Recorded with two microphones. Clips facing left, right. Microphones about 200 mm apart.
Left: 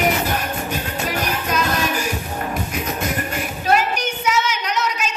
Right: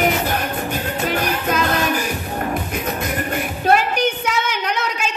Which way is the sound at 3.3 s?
55° right (ahead or behind).